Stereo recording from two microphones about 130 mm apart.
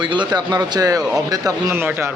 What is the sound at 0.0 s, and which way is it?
Speech, 35° right (ahead or behind).